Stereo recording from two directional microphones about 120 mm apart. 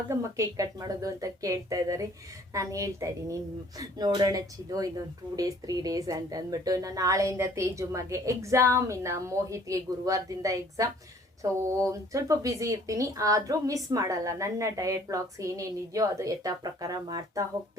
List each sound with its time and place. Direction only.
0.1 s a woman's voice: 25° right (ahead or behind)